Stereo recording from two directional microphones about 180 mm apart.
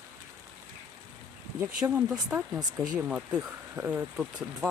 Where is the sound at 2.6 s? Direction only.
20° right (ahead or behind).